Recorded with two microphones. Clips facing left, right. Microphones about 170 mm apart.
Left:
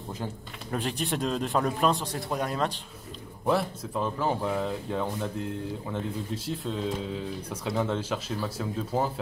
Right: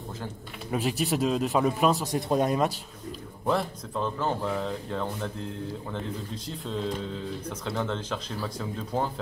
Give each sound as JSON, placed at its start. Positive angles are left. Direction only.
{"t": 0.7, "sound": "speech", "side_deg": -5}
{"t": 2.1, "sound": "speech", "side_deg": -20}
{"t": 3.4, "sound": "speech", "side_deg": 5}